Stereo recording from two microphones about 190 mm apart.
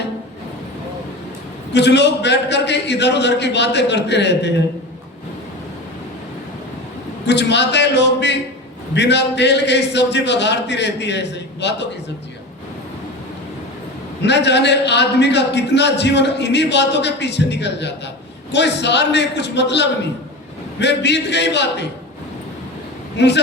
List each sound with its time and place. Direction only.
1.7 s a man's voice: 65° left (ahead or behind)
7.3 s a man's voice: 65° left (ahead or behind)
14.2 s a man's voice: 65° left (ahead or behind)
23.1 s a woman's voice: 65° left (ahead or behind)